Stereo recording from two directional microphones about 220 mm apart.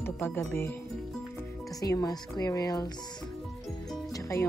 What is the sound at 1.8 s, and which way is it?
Speech, 15° left (ahead or behind).